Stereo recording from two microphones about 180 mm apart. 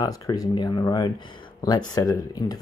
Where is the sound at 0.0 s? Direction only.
20° left (ahead or behind).